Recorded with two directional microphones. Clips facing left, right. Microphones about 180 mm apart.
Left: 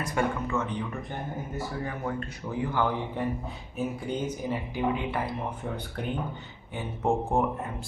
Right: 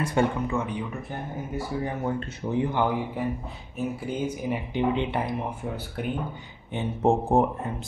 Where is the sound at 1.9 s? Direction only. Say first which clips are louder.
Right 4 dB; 25° right (ahead or behind); by 4.6 s 10° right (ahead or behind).